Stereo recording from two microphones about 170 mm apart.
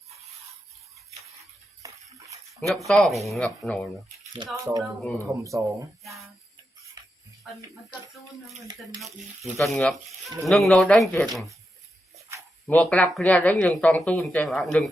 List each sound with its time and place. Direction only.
1.8 s a sound: 20° right (ahead or behind)
2.6 s speech: centre (ahead or behind)
4.4 s speech: 20° right (ahead or behind)
4.8 s speech: 5° left (ahead or behind)
5.2 s speech: 20° right (ahead or behind)
9.0 s speech: centre (ahead or behind)
12.6 s speech: 10° left (ahead or behind)